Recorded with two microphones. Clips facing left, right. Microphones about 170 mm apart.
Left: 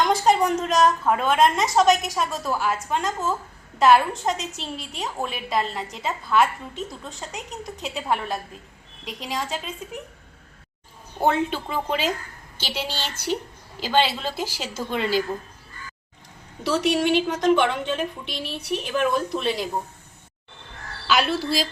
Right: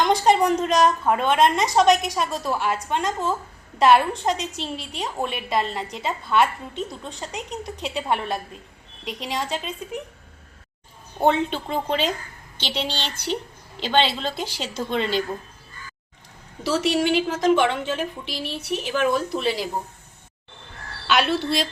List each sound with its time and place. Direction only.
0.0 s a woman's voice: centre (ahead or behind)
11.2 s a woman's voice: 5° left (ahead or behind)
16.6 s a woman's voice: centre (ahead or behind)
21.1 s a woman's voice: centre (ahead or behind)